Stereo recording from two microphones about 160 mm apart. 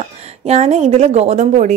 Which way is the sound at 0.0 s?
45° right (ahead or behind).